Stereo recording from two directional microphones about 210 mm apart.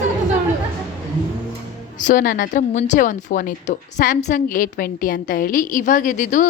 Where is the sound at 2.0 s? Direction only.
40° left (ahead or behind).